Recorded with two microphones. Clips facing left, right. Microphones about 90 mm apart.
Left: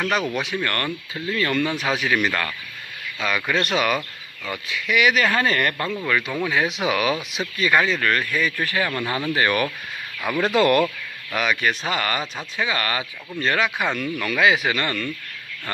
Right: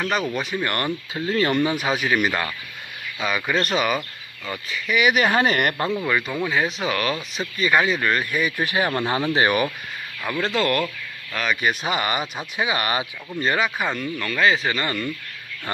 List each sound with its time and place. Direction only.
0.0 s speech: centre (ahead or behind)
0.6 s speech: 15° right (ahead or behind)
1.2 s speech: 25° right (ahead or behind)
1.6 s speech: 10° right (ahead or behind)
5.1 s speech: 20° right (ahead or behind)
10.2 s speech: 15° left (ahead or behind)
11.6 s speech: 10° right (ahead or behind)
13.3 s speech: 5° right (ahead or behind)
14.8 s speech: 5° right (ahead or behind)